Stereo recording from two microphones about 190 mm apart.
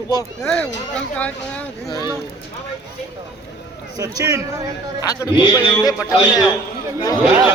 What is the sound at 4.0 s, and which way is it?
Speech, 20° right (ahead or behind).